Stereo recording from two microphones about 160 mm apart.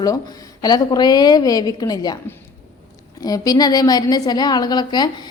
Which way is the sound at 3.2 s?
25° left (ahead or behind).